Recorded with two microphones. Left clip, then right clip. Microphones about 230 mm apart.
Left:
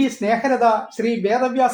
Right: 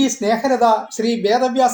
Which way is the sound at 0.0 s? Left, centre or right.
Right.